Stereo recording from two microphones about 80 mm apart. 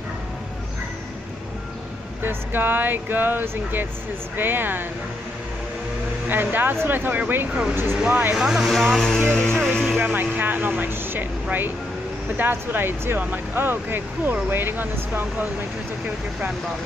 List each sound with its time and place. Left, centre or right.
2.2 s speech: right
6.2 s speech: right
8.4 s speech: centre
9.3 s music: centre
9.9 s speech: right
12.4 s speech: right